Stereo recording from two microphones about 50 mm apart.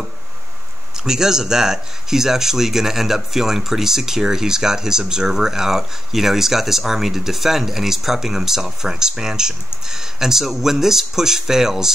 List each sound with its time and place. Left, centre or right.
1.0 s speech: centre